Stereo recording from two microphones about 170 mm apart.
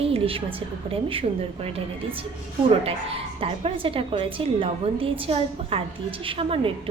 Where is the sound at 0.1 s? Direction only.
35° right (ahead or behind).